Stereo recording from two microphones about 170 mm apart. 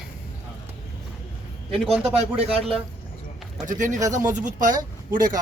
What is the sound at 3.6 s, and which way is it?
Speech, 50° right (ahead or behind).